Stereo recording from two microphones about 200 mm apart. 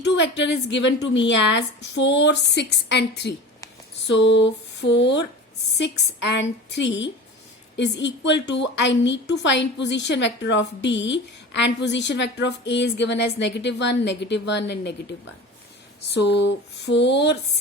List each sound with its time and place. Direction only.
0.0 s a woman's voice: 60° left (ahead or behind)
4.0 s a sound: 65° left (ahead or behind)
5.7 s a woman's voice: 60° left (ahead or behind)
16.2 s a woman's voice: 60° left (ahead or behind)